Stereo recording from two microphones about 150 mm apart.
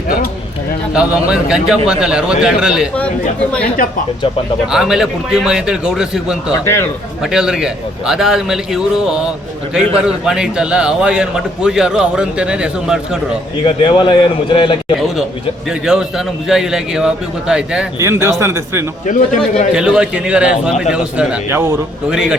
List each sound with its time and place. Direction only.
0.9 s a man's voice: 5° right (ahead or behind)
4.6 s a man's voice: 5° right (ahead or behind)
6.5 s a man's voice: 15° left (ahead or behind)
7.2 s a man's voice: 5° right (ahead or behind)
13.7 s a man's voice: 35° left (ahead or behind)
15.9 s a man's voice: 5° right (ahead or behind)
18.0 s speech: 20° right (ahead or behind)
19.7 s a man's voice: 5° right (ahead or behind)